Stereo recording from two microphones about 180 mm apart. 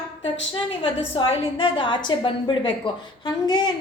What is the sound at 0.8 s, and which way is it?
A woman's voice, 30° left (ahead or behind).